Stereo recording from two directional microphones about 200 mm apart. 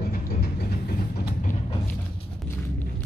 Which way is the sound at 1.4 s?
40° left (ahead or behind).